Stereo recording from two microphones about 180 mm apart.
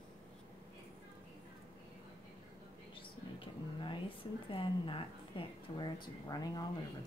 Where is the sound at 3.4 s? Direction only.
25° left (ahead or behind).